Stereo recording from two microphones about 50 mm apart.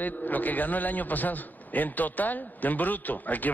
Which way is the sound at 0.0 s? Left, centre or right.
Left.